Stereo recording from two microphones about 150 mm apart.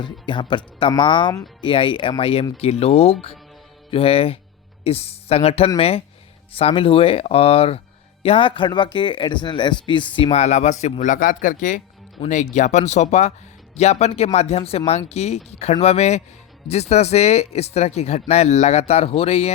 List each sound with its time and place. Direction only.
0.0 s speech: 30° left (ahead or behind)
10.3 s speech: 50° left (ahead or behind)